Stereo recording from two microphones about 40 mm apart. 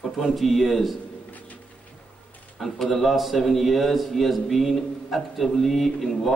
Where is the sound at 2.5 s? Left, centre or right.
Centre.